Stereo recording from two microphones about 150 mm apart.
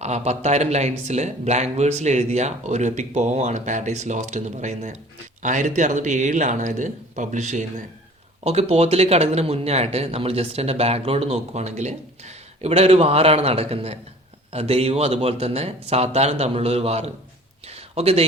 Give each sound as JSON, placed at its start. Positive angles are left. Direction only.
{"t": 0.0, "sound": "a man's voice", "side_deg": -50}